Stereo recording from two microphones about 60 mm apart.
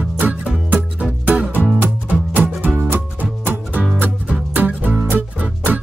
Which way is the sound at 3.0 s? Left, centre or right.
Right.